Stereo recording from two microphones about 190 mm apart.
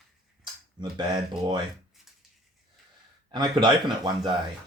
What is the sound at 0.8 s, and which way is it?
Speech, 20° right (ahead or behind).